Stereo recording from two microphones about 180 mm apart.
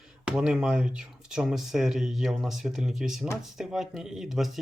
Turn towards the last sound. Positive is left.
turn(degrees=0)  # may be behind; listen again after turning